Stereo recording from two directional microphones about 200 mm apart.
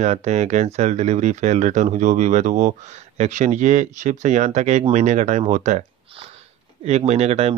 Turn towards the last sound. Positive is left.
turn(degrees=-30)  # may be behind; listen again after turning